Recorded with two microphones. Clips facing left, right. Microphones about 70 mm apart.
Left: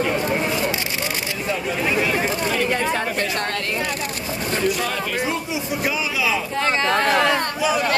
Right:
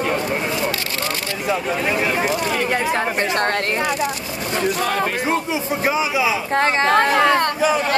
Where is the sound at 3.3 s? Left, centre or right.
Right.